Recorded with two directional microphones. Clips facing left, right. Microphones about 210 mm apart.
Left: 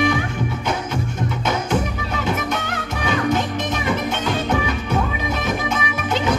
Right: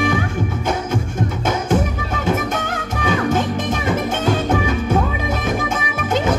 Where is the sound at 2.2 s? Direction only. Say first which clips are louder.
Right 4 dB; 45° right (ahead or behind).